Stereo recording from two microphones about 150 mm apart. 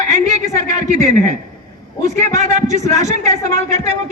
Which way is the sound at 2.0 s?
55° right (ahead or behind).